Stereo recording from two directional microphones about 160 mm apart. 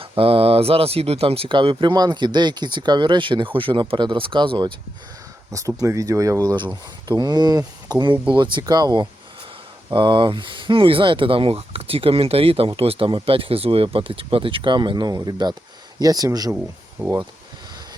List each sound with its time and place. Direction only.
0.0 s speech: 35° right (ahead or behind)
17.0 s speech: 10° right (ahead or behind)